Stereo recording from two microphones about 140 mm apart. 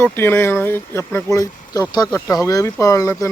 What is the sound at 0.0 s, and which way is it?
Speech, 15° left (ahead or behind).